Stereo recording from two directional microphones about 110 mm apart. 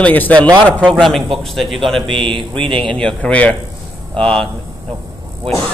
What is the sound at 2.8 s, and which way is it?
Speech, 5° left (ahead or behind).